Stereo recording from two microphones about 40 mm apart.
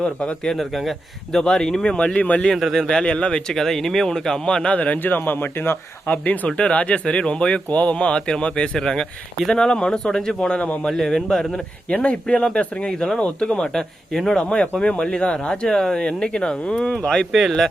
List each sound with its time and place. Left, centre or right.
0.0 s speech: left
0.5 s a man's voice: centre
1.3 s speech: centre
2.1 s speech: left
2.7 s speech: centre
4.9 s speech: left
6.1 s speech: left
6.6 s speech: left
8.8 s speech: centre
11.5 s speech: left
13.1 s speech: left
13.7 s speech: centre
14.5 s speech: left